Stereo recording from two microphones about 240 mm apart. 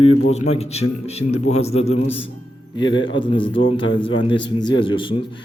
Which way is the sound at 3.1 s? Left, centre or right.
Centre.